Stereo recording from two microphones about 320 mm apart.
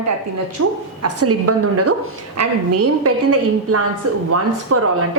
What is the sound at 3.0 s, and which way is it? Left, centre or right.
A woman's voice, right.